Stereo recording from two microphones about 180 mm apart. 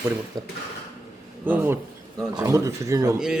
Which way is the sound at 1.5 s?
10° right (ahead or behind).